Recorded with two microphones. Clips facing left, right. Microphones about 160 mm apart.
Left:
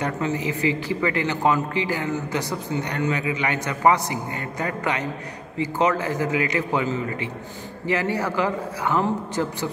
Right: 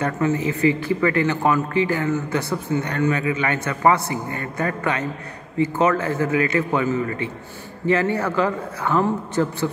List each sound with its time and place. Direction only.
0.0 s speech: 20° left (ahead or behind)